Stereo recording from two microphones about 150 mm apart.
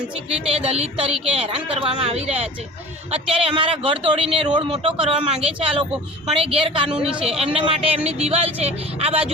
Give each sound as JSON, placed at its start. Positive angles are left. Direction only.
{"t": 0.3, "sound": "speech", "side_deg": -40}
{"t": 6.9, "sound": "speech", "side_deg": -5}
{"t": 7.3, "sound": "speech", "side_deg": -40}